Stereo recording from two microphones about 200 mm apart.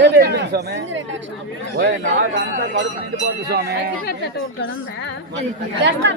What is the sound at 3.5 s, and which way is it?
Speech, 55° right (ahead or behind).